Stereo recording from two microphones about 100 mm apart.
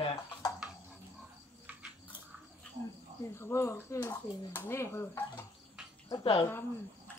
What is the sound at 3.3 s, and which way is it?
Speech, 25° left (ahead or behind).